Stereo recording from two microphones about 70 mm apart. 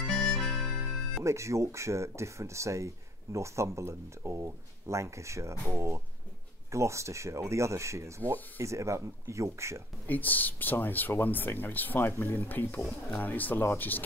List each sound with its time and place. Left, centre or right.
0.0 s harmonica: centre
1.2 s speech: right
10.0 s speech: left